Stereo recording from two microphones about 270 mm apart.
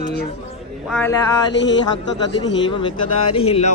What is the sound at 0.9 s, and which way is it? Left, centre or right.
Speech, centre.